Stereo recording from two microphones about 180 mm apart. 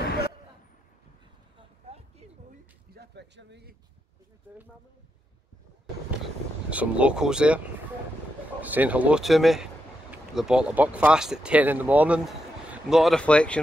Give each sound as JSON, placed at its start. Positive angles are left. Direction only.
{"t": 1.6, "sound": "a sound", "side_deg": -35}
{"t": 2.9, "sound": "speech", "side_deg": -65}
{"t": 6.2, "sound": "speech", "side_deg": -5}